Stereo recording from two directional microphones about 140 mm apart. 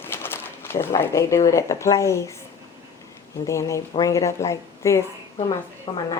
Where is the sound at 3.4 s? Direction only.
20° left (ahead or behind).